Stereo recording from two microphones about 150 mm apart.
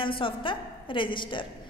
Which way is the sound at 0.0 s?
35° left (ahead or behind).